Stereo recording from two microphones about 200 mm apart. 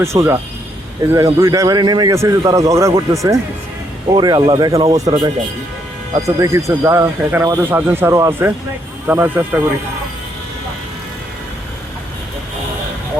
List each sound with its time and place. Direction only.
0.0 s speech: 15° right (ahead or behind)